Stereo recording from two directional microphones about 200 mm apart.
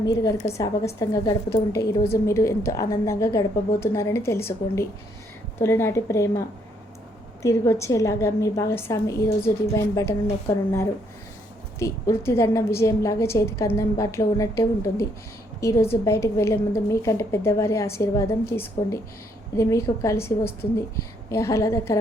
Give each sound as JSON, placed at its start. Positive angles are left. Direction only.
{"t": 0.0, "sound": "a woman's voice", "side_deg": 20}
{"t": 7.4, "sound": "a woman's voice", "side_deg": 15}